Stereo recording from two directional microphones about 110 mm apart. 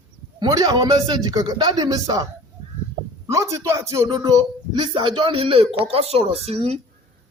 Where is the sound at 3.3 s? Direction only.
30° right (ahead or behind).